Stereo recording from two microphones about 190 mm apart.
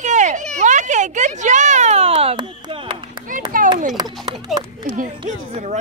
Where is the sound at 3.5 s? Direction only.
45° right (ahead or behind).